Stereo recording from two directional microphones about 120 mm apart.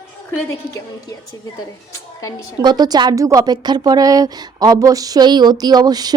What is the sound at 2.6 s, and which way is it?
A woman's voice, 35° right (ahead or behind).